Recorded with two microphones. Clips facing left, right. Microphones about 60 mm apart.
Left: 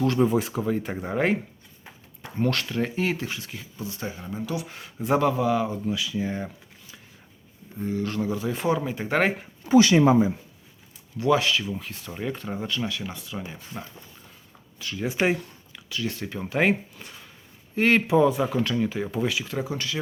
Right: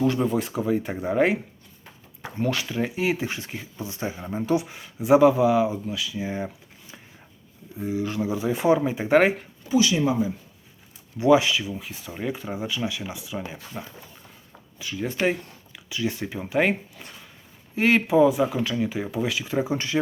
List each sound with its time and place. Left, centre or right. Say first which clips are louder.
0.2 s speech: left 2 dB; centre
2.4 s speech: even; centre
3.2 s speech: right 3 dB; right
4.6 s speech: right 1 dB; centre
5.8 s speech: left 3 dB; centre
6.2 s speech: right 1 dB; centre
7.8 s speech: right 1 dB; centre
9.6 s speech: left 4 dB; left
11.2 s speech: right 4 dB; centre
14.8 s speech: even; centre
19.5 s speech: right 4 dB; centre